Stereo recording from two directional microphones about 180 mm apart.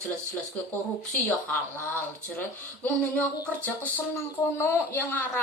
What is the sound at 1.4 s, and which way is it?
Speech, 10° left (ahead or behind).